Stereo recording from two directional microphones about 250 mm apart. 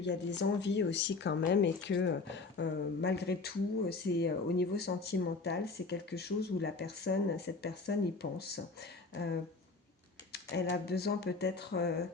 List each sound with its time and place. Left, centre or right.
0.0 s speech: left